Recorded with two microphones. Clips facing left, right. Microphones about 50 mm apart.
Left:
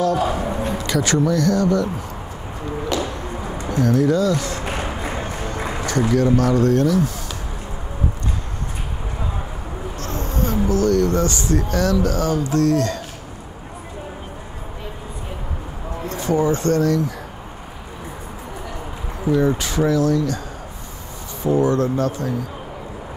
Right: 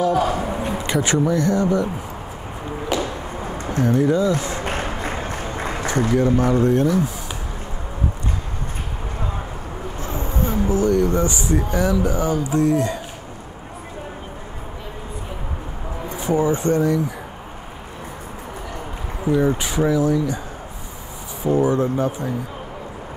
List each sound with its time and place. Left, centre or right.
0.0 s speech: centre
0.4 s a sound: centre
0.7 s speech: right
2.7 s a sound: centre
3.8 s speech: right
5.8 s a sound: right
6.3 s speech: right
9.9 s speech: centre
16.1 s speech: centre
19.3 s speech: centre
21.5 s speech: centre